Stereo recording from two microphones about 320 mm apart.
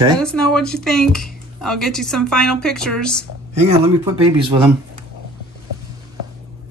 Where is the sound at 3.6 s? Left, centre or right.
Centre.